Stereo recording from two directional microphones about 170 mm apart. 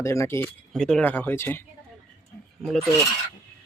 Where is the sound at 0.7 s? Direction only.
Centre (ahead or behind).